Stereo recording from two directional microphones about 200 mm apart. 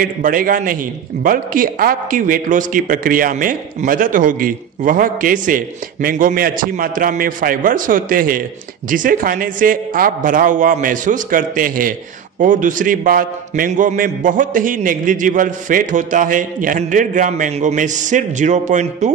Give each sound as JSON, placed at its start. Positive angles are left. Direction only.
{"t": 0.0, "sound": "a man's voice", "side_deg": -45}